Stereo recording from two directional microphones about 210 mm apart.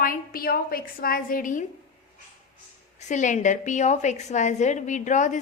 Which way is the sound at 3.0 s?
35° left (ahead or behind).